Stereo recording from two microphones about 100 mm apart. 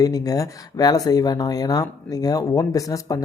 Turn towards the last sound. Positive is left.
turn(degrees=35)  # may be behind; listen again after turning